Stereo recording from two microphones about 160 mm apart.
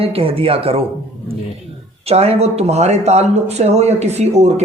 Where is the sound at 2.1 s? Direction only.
40° right (ahead or behind).